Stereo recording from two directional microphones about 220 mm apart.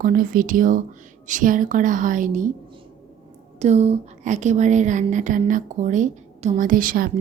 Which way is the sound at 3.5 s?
30° right (ahead or behind).